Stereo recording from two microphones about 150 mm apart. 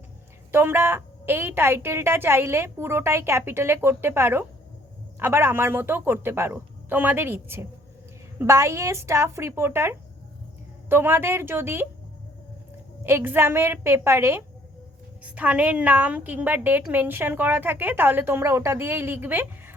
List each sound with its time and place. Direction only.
0.5 s a woman's voice: 15° right (ahead or behind)
13.1 s a woman's voice: 15° right (ahead or behind)